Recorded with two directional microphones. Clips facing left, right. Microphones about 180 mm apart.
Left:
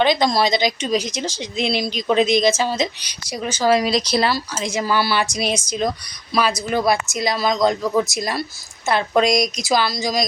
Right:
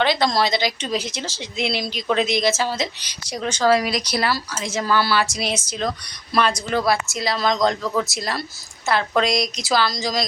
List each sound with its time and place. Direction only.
0.0 s speech: 15° left (ahead or behind)
6.3 s speech: 5° left (ahead or behind)